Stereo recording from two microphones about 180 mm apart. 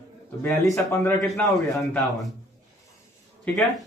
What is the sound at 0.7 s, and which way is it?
Speech, 15° left (ahead or behind).